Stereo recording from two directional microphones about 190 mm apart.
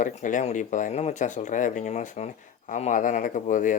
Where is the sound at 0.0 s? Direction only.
40° left (ahead or behind).